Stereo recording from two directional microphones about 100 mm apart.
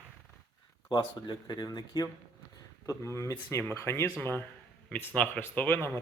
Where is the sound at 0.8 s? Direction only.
45° left (ahead or behind).